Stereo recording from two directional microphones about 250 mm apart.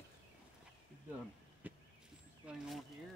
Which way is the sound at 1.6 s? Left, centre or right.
Centre.